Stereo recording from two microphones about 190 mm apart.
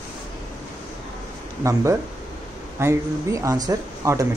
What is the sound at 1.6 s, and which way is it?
Speech, 15° right (ahead or behind).